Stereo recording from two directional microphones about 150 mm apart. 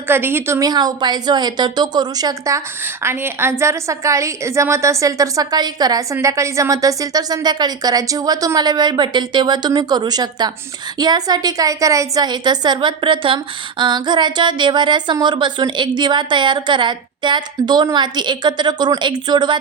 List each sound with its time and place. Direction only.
0.1 s a woman's voice: 15° right (ahead or behind)
3.0 s a woman's voice: 15° right (ahead or behind)